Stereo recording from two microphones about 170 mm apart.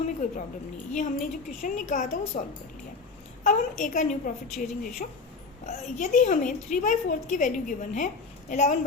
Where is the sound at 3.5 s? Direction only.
50° left (ahead or behind).